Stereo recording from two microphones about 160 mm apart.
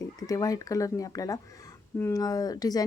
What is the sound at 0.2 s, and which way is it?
Speech, 20° left (ahead or behind).